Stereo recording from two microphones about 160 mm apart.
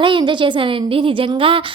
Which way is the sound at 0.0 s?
30° right (ahead or behind).